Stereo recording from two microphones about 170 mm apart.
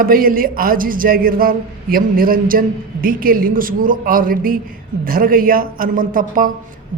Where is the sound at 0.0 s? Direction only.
60° right (ahead or behind).